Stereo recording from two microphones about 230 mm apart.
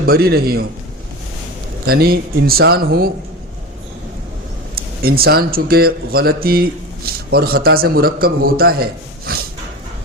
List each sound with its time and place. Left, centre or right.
0.0 s speech: right
1.9 s speech: right
4.7 s speech: right